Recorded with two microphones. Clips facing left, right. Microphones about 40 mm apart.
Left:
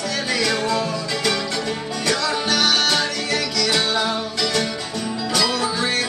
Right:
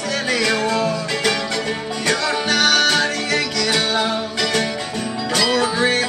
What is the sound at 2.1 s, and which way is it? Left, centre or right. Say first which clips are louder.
Music: right 2 dB; right.